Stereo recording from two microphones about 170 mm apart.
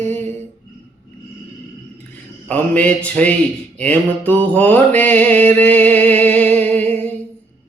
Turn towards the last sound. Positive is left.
turn(degrees=10)  # may be behind; listen again after turning